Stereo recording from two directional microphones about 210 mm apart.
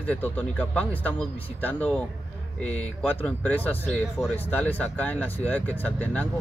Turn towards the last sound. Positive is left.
turn(degrees=5)  # may be behind; listen again after turning